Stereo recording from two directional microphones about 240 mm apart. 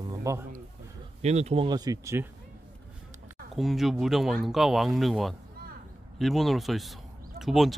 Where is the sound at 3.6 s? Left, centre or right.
Centre.